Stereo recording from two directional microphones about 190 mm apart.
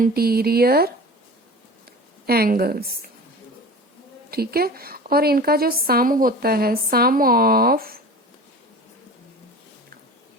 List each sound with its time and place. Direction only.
0.0 s a woman's voice: 55° right (ahead or behind)
2.2 s a woman's voice: 55° right (ahead or behind)
4.3 s a woman's voice: 55° right (ahead or behind)